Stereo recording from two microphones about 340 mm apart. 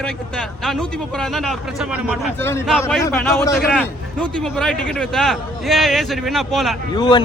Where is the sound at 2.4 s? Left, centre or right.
Centre.